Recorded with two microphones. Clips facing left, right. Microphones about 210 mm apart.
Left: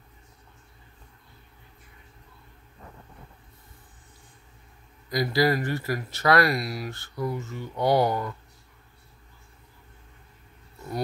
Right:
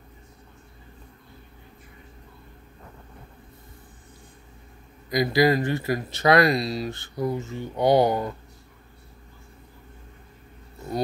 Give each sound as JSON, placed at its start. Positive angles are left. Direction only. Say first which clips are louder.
{"t": 5.1, "sound": "speech", "louder": "right 3 dB", "side_deg": -15}